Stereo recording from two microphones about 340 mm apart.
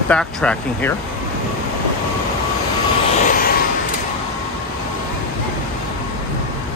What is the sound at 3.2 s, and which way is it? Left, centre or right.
Vehicle, left.